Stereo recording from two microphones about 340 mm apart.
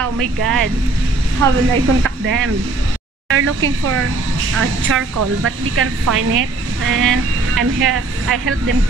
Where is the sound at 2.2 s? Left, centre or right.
Right.